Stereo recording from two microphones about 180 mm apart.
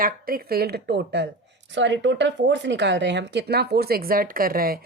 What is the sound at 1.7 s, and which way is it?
A woman's voice, 90° right.